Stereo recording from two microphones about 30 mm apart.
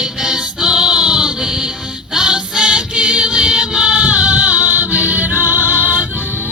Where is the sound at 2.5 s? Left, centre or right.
Right.